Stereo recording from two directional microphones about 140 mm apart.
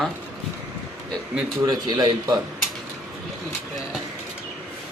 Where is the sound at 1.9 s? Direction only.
30° right (ahead or behind).